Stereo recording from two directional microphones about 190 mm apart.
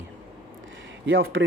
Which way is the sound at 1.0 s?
90° right.